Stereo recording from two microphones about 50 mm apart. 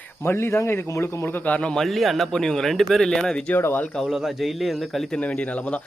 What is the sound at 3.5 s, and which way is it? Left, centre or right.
Speech, left.